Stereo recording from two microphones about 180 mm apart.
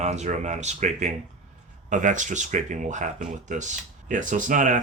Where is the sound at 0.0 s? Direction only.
40° right (ahead or behind).